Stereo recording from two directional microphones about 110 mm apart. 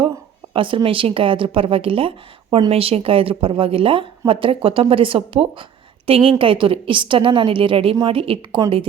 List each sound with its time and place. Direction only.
0.5 s a woman's voice: 50° right (ahead or behind)